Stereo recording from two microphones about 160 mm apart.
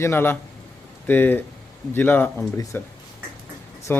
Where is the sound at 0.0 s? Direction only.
15° left (ahead or behind).